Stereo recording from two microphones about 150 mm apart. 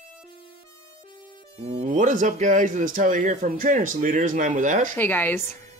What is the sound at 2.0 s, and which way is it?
A man's voice, 60° right (ahead or behind).